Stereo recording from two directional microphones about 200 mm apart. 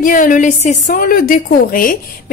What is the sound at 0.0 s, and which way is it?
A woman's voice, 40° left (ahead or behind).